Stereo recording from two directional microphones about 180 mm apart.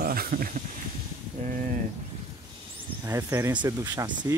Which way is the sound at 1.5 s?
50° right (ahead or behind).